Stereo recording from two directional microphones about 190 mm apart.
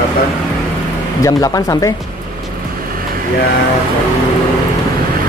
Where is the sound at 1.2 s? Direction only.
20° left (ahead or behind).